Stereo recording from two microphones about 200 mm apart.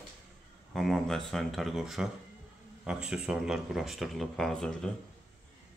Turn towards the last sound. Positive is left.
turn(degrees=5)  # may be behind; listen again after turning